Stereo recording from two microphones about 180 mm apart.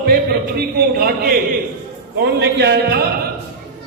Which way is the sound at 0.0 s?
60° right (ahead or behind).